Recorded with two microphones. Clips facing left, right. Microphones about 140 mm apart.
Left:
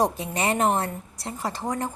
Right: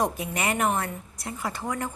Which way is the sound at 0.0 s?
30° left (ahead or behind).